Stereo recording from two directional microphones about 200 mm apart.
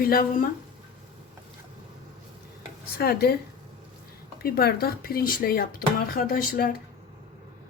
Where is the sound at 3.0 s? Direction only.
50° left (ahead or behind).